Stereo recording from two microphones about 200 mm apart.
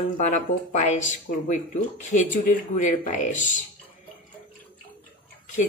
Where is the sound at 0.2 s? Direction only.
35° left (ahead or behind).